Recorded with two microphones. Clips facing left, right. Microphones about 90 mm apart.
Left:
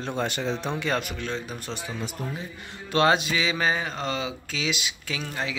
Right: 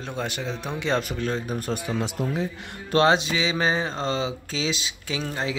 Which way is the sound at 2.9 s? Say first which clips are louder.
Right 2 dB; 25° right (ahead or behind).